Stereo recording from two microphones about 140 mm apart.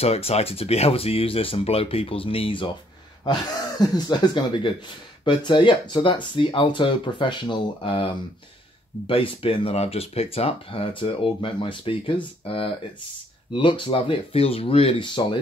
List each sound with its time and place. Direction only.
0.0 s speech: 45° left (ahead or behind)
3.3 s speech: 30° left (ahead or behind)